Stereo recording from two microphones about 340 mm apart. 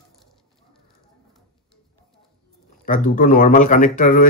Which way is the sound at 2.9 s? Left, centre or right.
Left.